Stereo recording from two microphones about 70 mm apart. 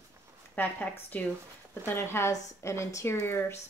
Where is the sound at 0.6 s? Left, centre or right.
Left.